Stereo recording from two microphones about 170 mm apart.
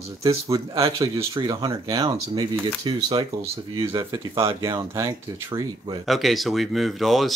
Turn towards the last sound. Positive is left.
turn(degrees=0)  # may be behind; listen again after turning